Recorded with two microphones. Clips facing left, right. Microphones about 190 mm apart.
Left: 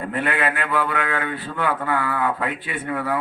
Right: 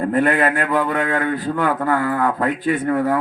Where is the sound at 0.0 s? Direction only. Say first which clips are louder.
Right 7 dB; 40° right (ahead or behind).